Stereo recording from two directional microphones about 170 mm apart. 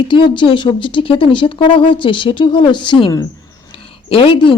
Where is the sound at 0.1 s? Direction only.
30° left (ahead or behind).